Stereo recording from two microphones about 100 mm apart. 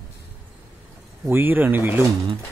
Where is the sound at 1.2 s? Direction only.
20° right (ahead or behind).